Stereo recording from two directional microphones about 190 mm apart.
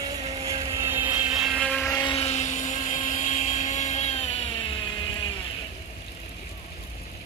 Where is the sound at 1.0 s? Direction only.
10° right (ahead or behind); by 2.0 s 5° left (ahead or behind).